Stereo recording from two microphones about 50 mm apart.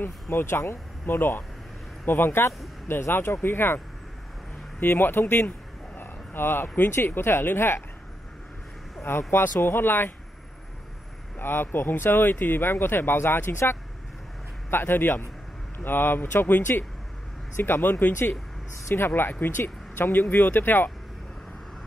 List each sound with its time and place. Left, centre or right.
0.0 s speech: left
1.0 s speech: left
5.9 s a sound: left
7.1 s speech: left
9.3 s speech: left
11.3 s speech: left